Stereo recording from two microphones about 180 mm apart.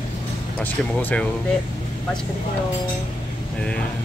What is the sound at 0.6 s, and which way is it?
Speech, 10° left (ahead or behind).